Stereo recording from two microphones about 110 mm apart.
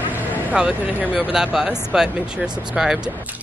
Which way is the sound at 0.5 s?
10° right (ahead or behind).